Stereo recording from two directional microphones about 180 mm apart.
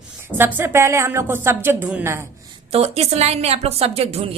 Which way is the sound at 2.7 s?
35° right (ahead or behind).